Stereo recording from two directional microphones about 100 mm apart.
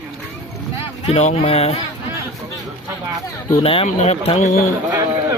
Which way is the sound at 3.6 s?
80° left.